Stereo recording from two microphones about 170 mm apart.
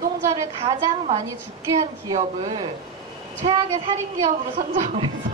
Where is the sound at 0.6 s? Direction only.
35° right (ahead or behind).